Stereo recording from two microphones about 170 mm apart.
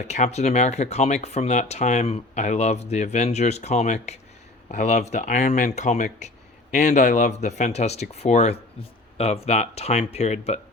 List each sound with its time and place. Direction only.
0.0 s speech: 40° left (ahead or behind)